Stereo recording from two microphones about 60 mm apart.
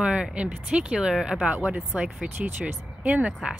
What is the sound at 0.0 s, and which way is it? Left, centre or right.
Speech, centre.